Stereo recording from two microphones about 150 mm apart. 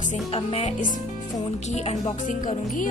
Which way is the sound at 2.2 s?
60° left (ahead or behind).